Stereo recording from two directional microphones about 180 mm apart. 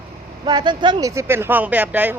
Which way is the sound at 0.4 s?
25° right (ahead or behind).